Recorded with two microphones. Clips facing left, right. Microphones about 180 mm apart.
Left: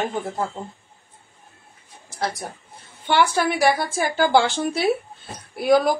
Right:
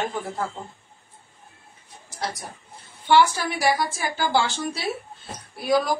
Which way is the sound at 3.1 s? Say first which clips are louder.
Even; 55° left (ahead or behind).